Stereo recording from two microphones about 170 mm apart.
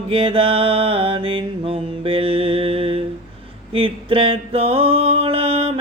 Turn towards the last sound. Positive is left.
turn(degrees=-35)  # may be behind; listen again after turning